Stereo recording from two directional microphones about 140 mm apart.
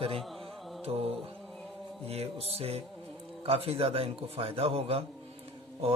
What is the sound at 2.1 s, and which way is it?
Speech, 45° right (ahead or behind).